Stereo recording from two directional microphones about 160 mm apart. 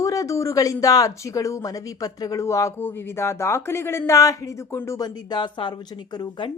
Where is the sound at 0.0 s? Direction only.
20° left (ahead or behind).